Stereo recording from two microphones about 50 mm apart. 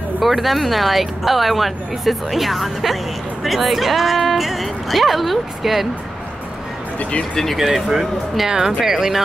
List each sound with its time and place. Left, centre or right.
0.2 s speech: centre
7.0 s speech: left
7.5 s speech: centre